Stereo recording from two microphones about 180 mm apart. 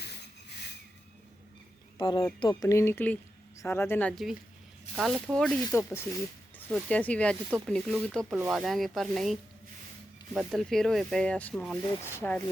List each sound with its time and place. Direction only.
2.0 s speech: 25° left (ahead or behind); by 8.4 s 5° left (ahead or behind)
8.4 s speech: 5° right (ahead or behind); by 12.4 s 10° left (ahead or behind)